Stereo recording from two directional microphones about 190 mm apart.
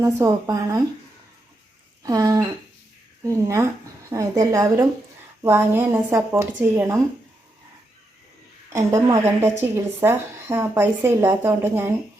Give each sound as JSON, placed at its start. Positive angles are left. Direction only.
{"t": 0.0, "sound": "a woman's voice", "side_deg": -20}
{"t": 2.0, "sound": "a sound", "side_deg": -20}
{"t": 3.2, "sound": "a woman's voice", "side_deg": -15}
{"t": 8.7, "sound": "a woman's voice", "side_deg": -15}